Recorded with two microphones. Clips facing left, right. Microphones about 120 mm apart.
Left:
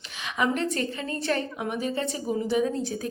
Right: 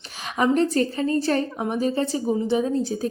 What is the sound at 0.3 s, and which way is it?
A woman's voice, 35° right (ahead or behind).